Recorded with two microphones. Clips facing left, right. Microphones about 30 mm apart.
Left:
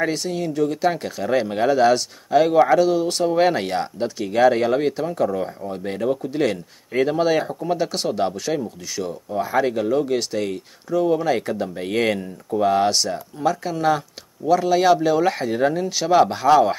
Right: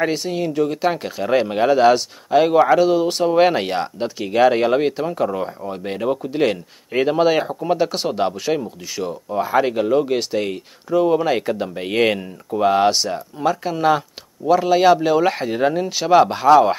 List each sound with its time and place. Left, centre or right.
0.0 s speech: centre